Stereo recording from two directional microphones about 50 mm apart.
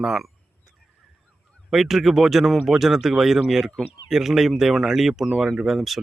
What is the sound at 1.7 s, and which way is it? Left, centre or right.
Speech, centre.